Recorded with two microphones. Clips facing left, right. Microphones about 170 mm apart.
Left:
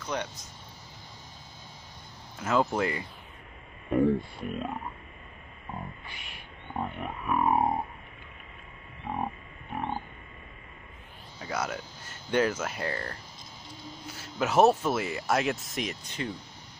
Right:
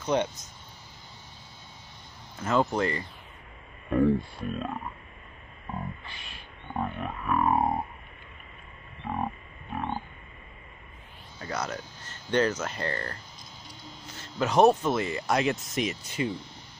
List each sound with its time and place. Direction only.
0.0 s speech: 25° right (ahead or behind)
2.4 s speech: 5° left (ahead or behind)
3.9 s speech: 20° left (ahead or behind)
6.0 s a sound: 20° left (ahead or behind)
9.1 s a sound: 20° left (ahead or behind)
11.3 s speech: 10° left (ahead or behind); by 16.3 s 10° right (ahead or behind)